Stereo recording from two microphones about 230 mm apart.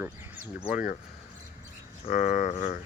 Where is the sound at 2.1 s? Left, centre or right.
Left.